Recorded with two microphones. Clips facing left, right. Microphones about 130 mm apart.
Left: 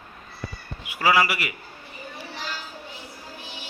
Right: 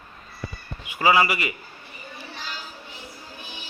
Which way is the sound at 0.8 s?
5° left (ahead or behind).